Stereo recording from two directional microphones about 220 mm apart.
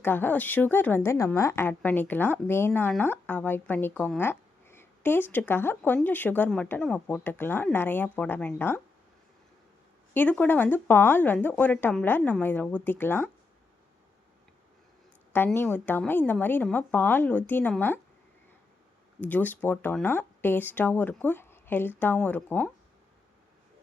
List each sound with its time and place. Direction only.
0.0 s a woman's voice: 10° left (ahead or behind)
10.2 s a woman's voice: 5° left (ahead or behind)
15.3 s a woman's voice: 10° left (ahead or behind)
19.2 s a woman's voice: 5° left (ahead or behind)